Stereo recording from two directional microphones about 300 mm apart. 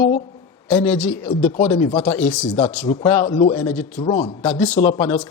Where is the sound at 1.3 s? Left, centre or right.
Centre.